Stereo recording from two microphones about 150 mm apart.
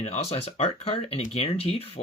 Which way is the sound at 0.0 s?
45° left (ahead or behind).